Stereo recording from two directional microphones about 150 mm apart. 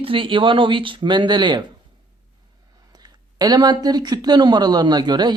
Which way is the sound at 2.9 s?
25° right (ahead or behind).